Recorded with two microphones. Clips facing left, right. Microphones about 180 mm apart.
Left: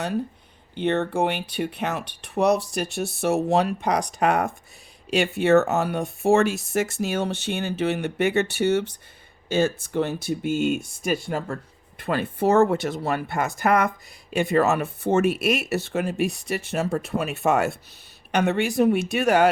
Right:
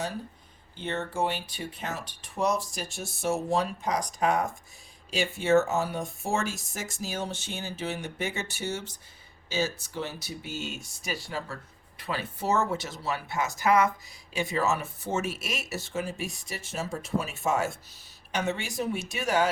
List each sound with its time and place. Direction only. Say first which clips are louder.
0.8 s speech: left 8 dB; 65° left (ahead or behind)